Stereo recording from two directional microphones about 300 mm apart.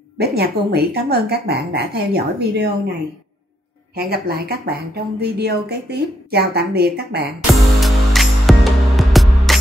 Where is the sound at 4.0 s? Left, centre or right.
Right.